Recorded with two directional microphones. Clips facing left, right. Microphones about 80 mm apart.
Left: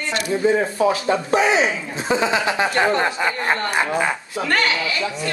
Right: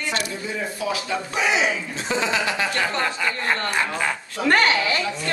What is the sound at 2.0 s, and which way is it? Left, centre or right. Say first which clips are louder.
Speech: left 4 dB; left.